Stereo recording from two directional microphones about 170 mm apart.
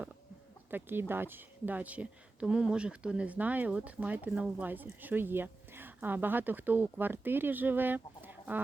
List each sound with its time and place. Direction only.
0.7 s a woman's voice: 10° right (ahead or behind)